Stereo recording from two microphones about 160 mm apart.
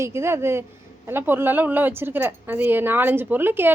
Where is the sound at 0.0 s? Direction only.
15° right (ahead or behind).